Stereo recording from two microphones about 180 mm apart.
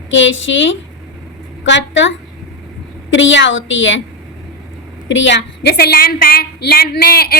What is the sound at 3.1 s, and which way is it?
Speech, 90° left.